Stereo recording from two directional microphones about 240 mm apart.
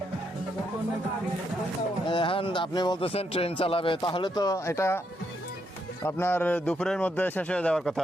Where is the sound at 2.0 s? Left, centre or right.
Left.